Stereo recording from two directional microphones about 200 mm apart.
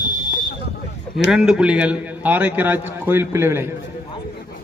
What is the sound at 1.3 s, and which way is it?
A man's voice, 5° right (ahead or behind).